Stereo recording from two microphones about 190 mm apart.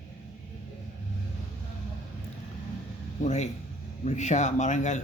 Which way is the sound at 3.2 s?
35° left (ahead or behind).